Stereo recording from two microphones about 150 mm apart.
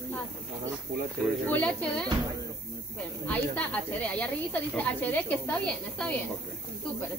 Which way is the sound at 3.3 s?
10° left (ahead or behind).